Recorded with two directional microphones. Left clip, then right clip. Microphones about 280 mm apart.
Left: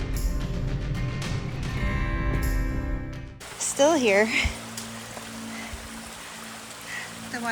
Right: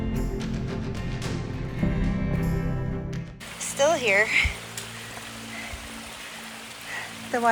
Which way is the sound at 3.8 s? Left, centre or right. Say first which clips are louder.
Left 1 dB; centre.